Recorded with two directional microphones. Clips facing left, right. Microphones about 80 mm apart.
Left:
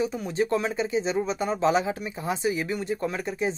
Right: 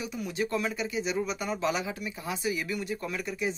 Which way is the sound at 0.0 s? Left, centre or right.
Left.